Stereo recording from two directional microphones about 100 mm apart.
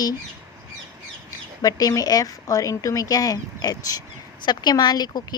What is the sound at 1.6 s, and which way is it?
A woman's voice, 40° left (ahead or behind).